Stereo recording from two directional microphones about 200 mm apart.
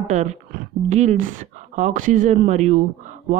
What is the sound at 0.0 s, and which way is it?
A woman's voice, 35° right (ahead or behind).